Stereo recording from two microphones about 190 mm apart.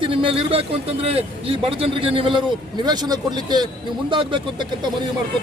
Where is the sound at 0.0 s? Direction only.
30° right (ahead or behind).